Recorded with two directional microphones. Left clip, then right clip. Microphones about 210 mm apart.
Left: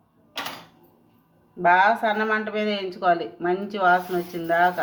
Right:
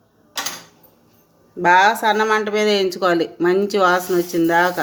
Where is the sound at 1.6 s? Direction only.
60° right (ahead or behind).